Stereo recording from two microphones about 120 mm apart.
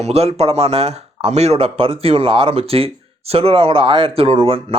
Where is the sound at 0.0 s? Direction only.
60° right (ahead or behind).